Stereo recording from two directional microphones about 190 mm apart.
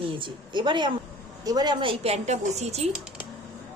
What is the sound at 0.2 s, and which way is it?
A woman's voice, 25° right (ahead or behind).